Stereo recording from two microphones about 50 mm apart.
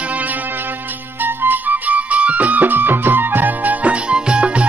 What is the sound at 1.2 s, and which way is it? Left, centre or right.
Music, right.